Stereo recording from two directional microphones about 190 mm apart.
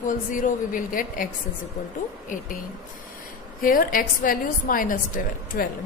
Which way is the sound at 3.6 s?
45° left (ahead or behind).